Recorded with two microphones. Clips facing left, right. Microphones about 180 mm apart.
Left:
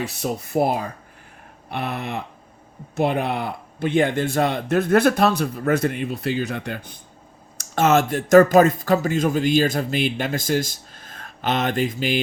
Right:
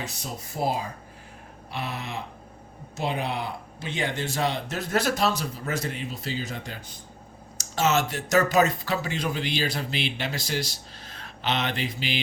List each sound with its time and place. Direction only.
0.0 s speech: 60° left (ahead or behind)